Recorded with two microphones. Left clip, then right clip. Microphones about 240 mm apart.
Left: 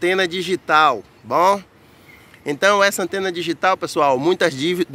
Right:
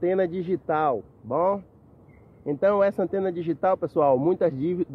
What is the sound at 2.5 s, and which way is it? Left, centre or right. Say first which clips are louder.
Speech: left 6 dB; centre.